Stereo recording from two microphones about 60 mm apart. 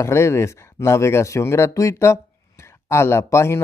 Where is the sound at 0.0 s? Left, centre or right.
Left.